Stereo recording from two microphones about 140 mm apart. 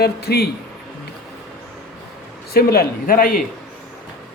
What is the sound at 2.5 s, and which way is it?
Speech, 90° left.